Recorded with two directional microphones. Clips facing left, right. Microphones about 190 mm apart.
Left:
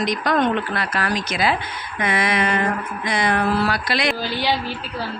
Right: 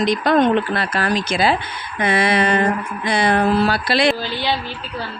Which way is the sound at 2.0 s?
30° right (ahead or behind).